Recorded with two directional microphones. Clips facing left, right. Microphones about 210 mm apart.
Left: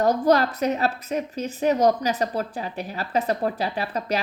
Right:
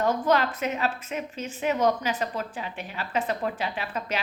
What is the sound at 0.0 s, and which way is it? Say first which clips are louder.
A woman's voice: left 4 dB; 40° left (ahead or behind).